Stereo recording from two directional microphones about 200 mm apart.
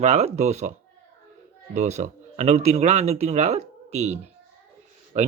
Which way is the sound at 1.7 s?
35° right (ahead or behind).